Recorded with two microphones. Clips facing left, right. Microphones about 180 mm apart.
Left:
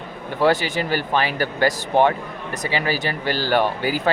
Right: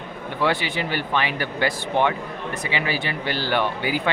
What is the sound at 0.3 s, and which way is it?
Speech, 40° left (ahead or behind).